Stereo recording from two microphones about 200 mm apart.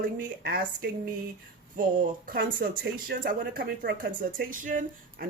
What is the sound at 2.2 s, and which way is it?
A woman's voice, 50° right (ahead or behind).